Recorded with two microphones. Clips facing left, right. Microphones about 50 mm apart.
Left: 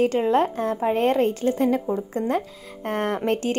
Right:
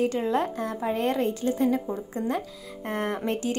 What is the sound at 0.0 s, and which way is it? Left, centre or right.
A woman's voice, left.